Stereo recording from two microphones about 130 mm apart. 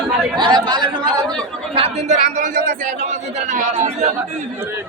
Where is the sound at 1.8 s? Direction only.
55° right (ahead or behind).